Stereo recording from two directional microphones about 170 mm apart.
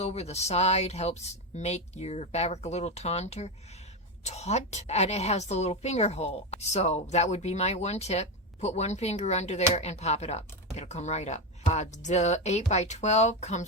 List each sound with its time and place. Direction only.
0.0 s a woman's voice: 40° left (ahead or behind)